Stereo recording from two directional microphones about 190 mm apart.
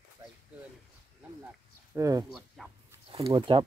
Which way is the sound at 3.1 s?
30° right (ahead or behind).